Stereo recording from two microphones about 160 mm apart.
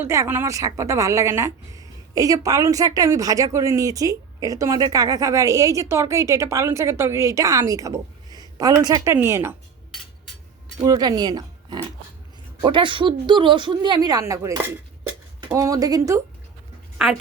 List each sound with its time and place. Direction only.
0.0 s a woman's voice: 15° right (ahead or behind)
10.8 s a woman's voice: 25° right (ahead or behind)